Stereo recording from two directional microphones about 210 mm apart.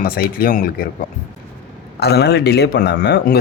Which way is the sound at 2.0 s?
50° left (ahead or behind).